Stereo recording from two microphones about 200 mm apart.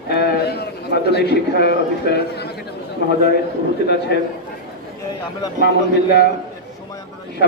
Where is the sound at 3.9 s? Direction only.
55° left (ahead or behind).